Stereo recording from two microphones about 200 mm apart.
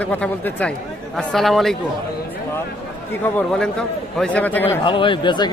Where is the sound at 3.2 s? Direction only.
5° left (ahead or behind).